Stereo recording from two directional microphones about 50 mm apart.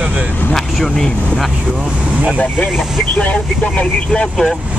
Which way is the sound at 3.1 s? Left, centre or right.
Left.